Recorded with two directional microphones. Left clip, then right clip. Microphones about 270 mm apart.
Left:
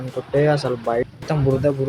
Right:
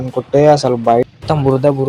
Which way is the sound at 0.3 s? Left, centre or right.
Centre.